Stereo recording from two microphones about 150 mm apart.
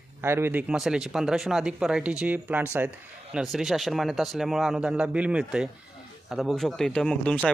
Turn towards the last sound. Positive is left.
turn(degrees=5)  # may be behind; listen again after turning